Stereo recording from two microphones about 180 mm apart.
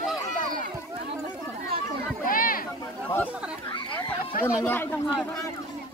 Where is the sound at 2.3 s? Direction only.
50° left (ahead or behind).